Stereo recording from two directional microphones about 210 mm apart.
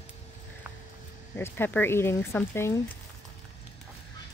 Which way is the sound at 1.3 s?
10° left (ahead or behind).